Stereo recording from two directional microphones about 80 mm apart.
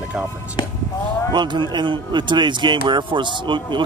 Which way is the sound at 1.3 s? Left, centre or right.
Right.